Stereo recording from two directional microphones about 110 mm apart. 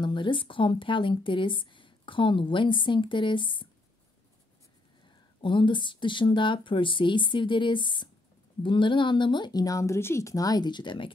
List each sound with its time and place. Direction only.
0.0 s speech: 45° left (ahead or behind)
5.0 s speech: 50° left (ahead or behind)